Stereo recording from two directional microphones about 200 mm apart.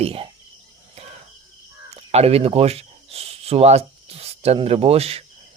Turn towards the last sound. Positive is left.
turn(degrees=-30)  # may be behind; listen again after turning